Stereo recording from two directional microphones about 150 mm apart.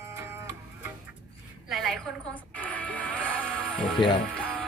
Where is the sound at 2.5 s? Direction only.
10° left (ahead or behind).